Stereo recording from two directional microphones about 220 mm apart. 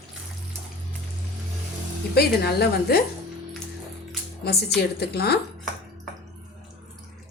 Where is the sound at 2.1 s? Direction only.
45° left (ahead or behind).